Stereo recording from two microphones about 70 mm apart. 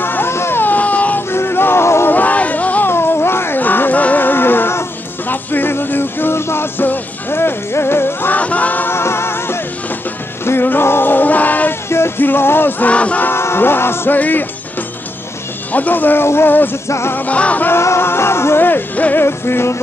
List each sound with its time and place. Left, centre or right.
0.0 s a sound: left
1.3 s music: left
2.1 s music: left
2.9 s music: left
8.4 s music: left
8.9 s music: left; by 13.3 s centre
13.3 s music: left
15.7 s speech: left
16.8 s music: left
17.1 s speech: left
17.6 s music: left
19.2 s music: left